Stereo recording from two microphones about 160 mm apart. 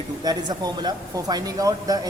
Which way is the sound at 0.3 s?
25° right (ahead or behind).